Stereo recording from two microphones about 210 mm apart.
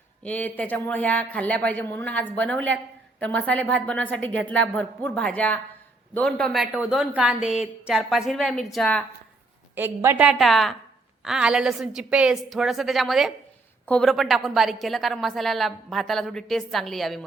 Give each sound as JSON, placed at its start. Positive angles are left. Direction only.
{"t": 0.2, "sound": "a woman's voice", "side_deg": 5}
{"t": 9.7, "sound": "a woman's voice", "side_deg": -10}